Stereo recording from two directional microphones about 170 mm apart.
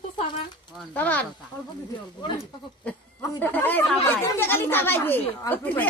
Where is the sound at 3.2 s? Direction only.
10° left (ahead or behind).